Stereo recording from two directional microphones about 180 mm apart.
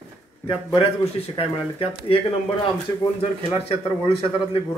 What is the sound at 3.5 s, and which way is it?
Speech, 35° left (ahead or behind).